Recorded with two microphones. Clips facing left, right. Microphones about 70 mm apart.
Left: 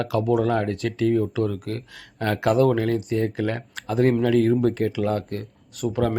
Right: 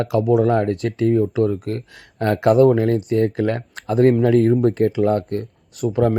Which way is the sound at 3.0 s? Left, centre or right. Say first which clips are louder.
Right 5 dB; right.